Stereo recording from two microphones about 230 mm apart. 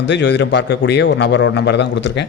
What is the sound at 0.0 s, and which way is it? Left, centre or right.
A man's voice, left.